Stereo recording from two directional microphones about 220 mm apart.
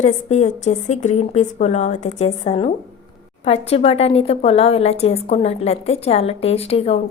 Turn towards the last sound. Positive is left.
turn(degrees=25)  # may be behind; listen again after turning